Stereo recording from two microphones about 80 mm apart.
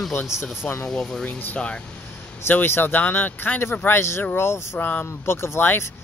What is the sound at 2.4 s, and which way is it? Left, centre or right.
Speech, left.